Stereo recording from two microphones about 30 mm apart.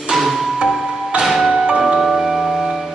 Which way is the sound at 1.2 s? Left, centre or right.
Centre.